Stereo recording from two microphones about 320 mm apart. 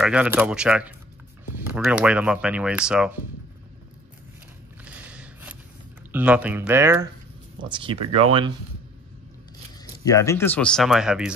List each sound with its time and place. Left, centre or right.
0.0 s speech: centre
4.8 s a sound: centre
6.1 s speech: centre
10.0 s speech: centre